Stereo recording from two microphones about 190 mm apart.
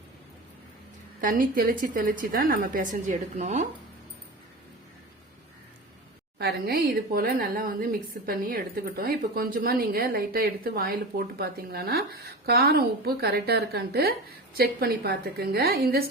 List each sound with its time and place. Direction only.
1.2 s a woman's voice: 50° right (ahead or behind)
6.4 s a woman's voice: 55° right (ahead or behind)